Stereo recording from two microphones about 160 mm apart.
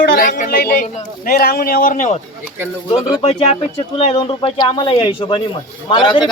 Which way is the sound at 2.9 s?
35° left (ahead or behind).